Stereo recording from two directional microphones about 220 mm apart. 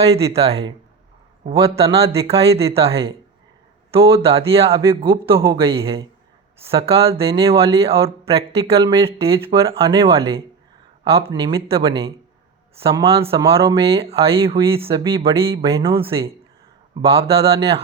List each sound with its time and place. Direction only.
0.3 s speech: 25° right (ahead or behind)